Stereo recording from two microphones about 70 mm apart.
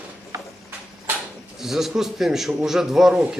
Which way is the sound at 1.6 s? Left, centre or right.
Centre.